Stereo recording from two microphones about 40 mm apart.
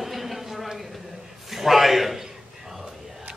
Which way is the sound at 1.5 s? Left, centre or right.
Centre.